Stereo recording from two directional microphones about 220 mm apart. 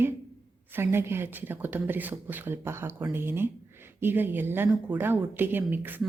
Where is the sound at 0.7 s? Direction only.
10° right (ahead or behind).